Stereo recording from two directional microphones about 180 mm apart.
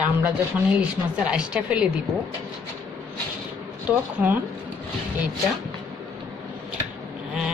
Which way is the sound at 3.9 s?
10° right (ahead or behind).